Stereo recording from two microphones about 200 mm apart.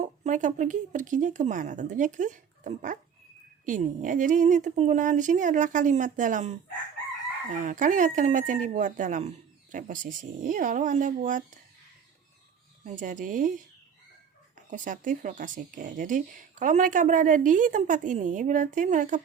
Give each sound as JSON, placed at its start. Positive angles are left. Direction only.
{"t": 0.0, "sound": "speech", "side_deg": -40}
{"t": 12.8, "sound": "speech", "side_deg": -40}
{"t": 14.7, "sound": "speech", "side_deg": -40}